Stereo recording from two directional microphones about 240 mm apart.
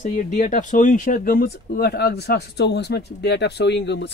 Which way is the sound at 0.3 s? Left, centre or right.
Left.